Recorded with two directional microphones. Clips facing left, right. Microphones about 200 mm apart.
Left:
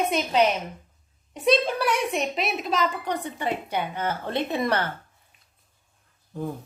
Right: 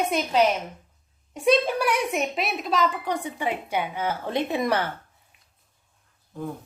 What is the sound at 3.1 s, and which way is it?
A woman's voice, 10° right (ahead or behind).